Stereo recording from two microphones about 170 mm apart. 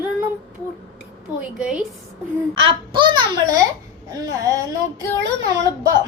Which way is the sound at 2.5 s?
30° right (ahead or behind).